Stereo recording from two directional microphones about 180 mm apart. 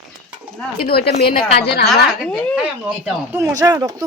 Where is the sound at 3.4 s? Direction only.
20° right (ahead or behind).